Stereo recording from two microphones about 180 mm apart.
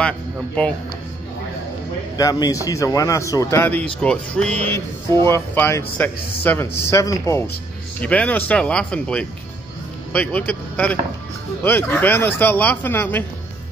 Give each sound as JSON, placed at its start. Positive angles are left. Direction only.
{"t": 2.1, "sound": "a man's voice", "side_deg": 20}